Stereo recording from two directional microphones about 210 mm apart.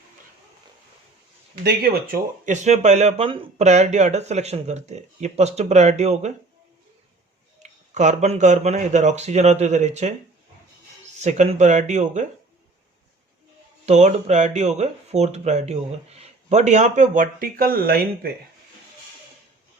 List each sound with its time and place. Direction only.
1.6 s speech: 45° right (ahead or behind)
7.6 s speech: 35° right (ahead or behind)
11.2 s speech: 35° right (ahead or behind)
13.8 s speech: 35° right (ahead or behind)